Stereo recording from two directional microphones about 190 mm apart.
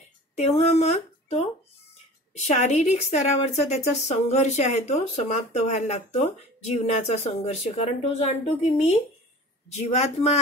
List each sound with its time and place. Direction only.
0.4 s a woman's voice: 35° left (ahead or behind)